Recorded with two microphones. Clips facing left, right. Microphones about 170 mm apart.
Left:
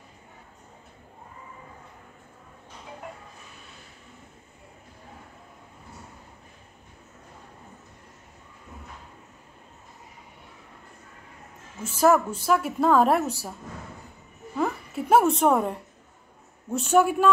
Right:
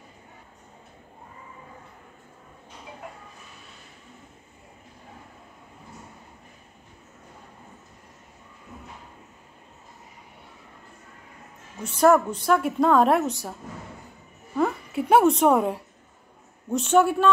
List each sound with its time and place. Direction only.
11.8 s a woman's voice: 5° left (ahead or behind)
14.6 s a woman's voice: centre (ahead or behind)
16.7 s a man's voice: 10° left (ahead or behind)